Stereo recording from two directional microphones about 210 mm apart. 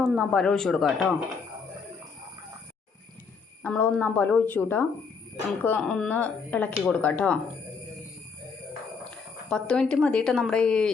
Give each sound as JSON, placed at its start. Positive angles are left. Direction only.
{"t": 0.0, "sound": "speech", "side_deg": 0}
{"t": 3.6, "sound": "speech", "side_deg": 10}
{"t": 9.0, "sound": "speech", "side_deg": 5}